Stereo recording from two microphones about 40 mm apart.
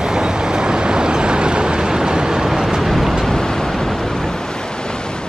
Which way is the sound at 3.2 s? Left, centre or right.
Centre.